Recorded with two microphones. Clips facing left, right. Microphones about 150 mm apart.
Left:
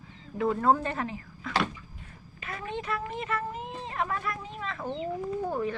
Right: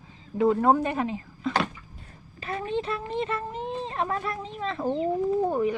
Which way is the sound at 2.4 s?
30° right (ahead or behind).